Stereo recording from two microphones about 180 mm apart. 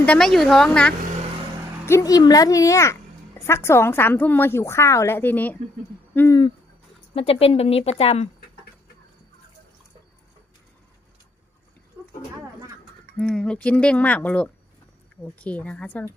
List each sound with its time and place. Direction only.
0.0 s a woman's voice: 5° left (ahead or behind)
1.9 s speech: 20° left (ahead or behind)
7.1 s a woman's voice: 30° left (ahead or behind)
12.0 s a sound: 15° right (ahead or behind)
13.1 s speech: 5° left (ahead or behind)